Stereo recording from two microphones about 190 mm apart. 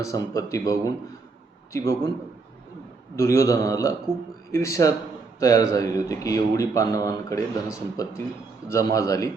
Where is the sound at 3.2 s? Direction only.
15° left (ahead or behind).